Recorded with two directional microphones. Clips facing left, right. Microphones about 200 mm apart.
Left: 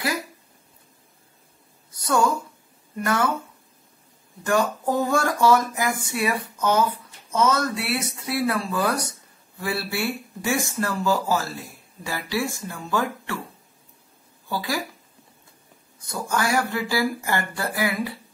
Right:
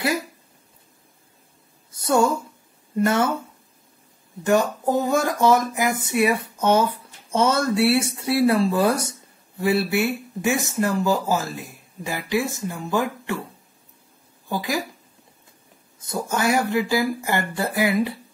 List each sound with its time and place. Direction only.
1.9 s a sound: 25° right (ahead or behind)
3.0 s speech: 25° right (ahead or behind)
4.5 s speech: 20° right (ahead or behind)
14.5 s speech: 20° right (ahead or behind)
16.0 s speech: 25° right (ahead or behind)